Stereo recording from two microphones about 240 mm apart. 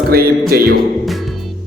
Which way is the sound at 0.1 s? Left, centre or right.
Right.